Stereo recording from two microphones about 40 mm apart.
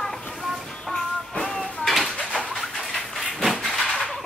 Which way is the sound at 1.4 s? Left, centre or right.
Centre.